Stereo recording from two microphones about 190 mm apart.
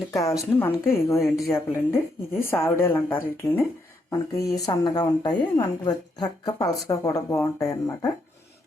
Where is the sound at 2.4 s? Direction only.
10° left (ahead or behind).